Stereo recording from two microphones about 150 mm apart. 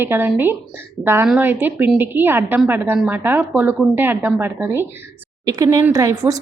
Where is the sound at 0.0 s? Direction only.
15° right (ahead or behind).